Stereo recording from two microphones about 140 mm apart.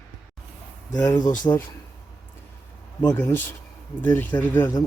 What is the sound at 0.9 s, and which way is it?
Speech, 15° left (ahead or behind).